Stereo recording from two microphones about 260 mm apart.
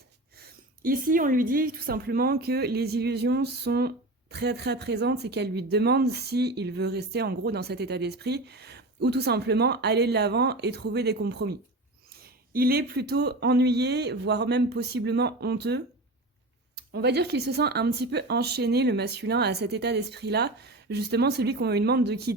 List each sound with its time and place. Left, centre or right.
0.3 s a woman's voice: right
12.5 s a woman's voice: right